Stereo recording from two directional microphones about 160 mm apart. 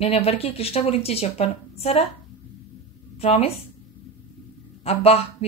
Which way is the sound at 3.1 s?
40° left (ahead or behind).